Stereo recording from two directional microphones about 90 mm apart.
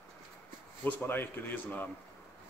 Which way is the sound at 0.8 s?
20° left (ahead or behind).